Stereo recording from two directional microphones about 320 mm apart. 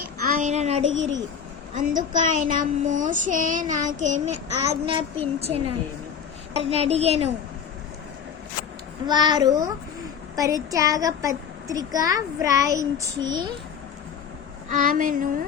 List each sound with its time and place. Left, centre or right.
0.3 s child singing: right
0.8 s speech: right
1.7 s child singing: right
4.7 s a child's voice: centre
5.4 s child singing: centre
9.0 s a child's voice: centre
14.7 s child singing: right